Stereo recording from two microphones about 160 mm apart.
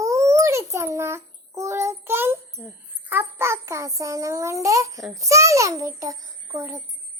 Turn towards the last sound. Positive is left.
turn(degrees=-20)  # may be behind; listen again after turning